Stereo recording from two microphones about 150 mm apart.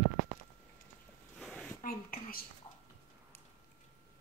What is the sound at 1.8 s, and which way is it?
Whispering, 70° left (ahead or behind).